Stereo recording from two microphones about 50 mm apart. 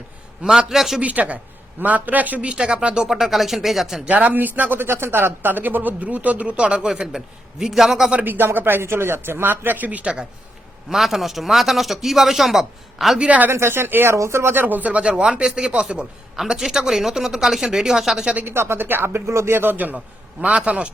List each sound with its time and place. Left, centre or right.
0.4 s speech: centre
1.0 s speech: right; by 4.0 s centre
4.0 s a man's voice: right; by 8.1 s centre
8.2 s speech: right
10.8 s a man's voice: centre
13.1 s a man's voice: right
13.5 s speech: right
14.1 s speech: right
14.5 s speech: right; by 18.3 s centre
18.4 s speech: right
19.1 s speech: right
19.5 s speech: right
20.4 s a man's voice: right